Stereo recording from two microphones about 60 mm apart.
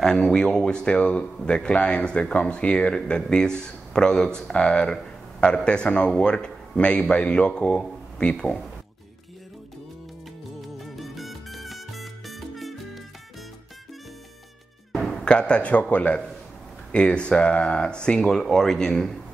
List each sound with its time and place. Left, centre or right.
0.0 s a man's voice: centre
10.8 s salsa music: centre
14.9 s music: centre
15.2 s a man's voice: centre